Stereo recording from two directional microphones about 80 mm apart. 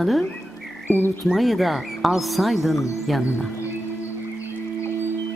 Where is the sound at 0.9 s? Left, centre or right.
Left.